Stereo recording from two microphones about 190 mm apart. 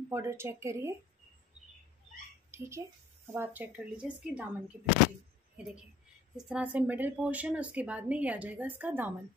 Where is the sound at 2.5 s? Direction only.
15° right (ahead or behind).